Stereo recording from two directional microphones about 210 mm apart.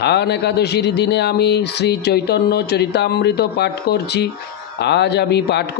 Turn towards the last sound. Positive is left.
turn(degrees=50)  # may be behind; listen again after turning